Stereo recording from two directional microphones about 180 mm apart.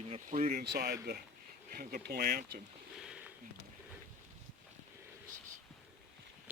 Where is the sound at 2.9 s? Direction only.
5° right (ahead or behind).